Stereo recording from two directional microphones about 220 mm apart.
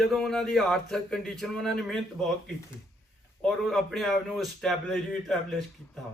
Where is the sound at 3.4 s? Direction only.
Centre (ahead or behind).